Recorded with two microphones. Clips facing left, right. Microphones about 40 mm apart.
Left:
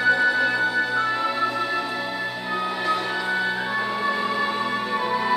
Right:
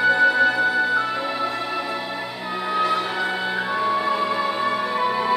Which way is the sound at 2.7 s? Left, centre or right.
Centre.